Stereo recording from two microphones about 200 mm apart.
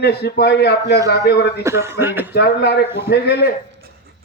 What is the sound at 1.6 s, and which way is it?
Speech, 15° right (ahead or behind).